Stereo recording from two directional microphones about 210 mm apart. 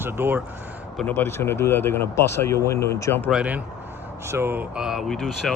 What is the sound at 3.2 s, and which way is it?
Speech, 5° right (ahead or behind).